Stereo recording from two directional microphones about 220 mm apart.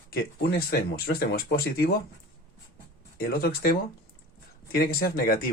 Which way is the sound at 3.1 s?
45° left (ahead or behind).